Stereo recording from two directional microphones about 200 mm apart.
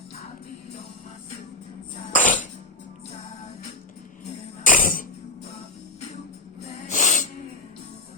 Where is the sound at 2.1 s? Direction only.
40° left (ahead or behind).